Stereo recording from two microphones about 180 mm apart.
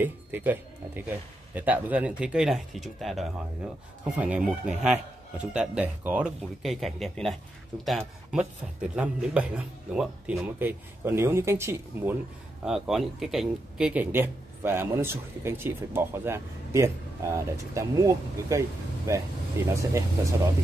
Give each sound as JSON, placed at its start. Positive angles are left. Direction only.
{"t": 0.0, "sound": "speech", "side_deg": -10}
{"t": 12.6, "sound": "speech", "side_deg": 0}